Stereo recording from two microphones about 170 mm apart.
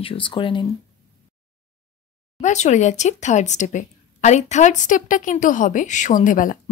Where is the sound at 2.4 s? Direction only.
45° left (ahead or behind).